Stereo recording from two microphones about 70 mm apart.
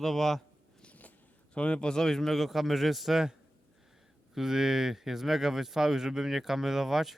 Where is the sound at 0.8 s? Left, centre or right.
Left.